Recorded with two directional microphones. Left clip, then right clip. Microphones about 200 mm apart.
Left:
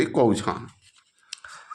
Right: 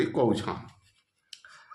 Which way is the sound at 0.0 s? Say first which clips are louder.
Left 5 dB; 30° left (ahead or behind).